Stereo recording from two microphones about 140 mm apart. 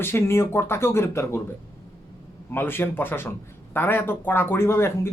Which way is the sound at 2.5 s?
15° left (ahead or behind).